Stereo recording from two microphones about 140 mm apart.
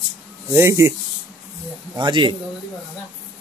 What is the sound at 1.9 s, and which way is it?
Speech, 35° right (ahead or behind).